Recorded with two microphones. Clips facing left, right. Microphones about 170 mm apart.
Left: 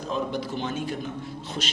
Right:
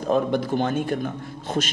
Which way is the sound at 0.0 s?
55° right (ahead or behind).